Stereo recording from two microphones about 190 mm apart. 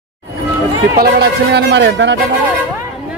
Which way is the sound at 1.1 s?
65° right (ahead or behind).